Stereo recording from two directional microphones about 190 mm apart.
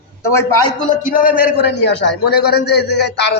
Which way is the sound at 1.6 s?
65° left (ahead or behind).